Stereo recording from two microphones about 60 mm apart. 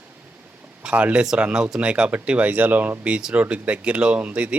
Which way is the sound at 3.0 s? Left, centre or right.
Centre.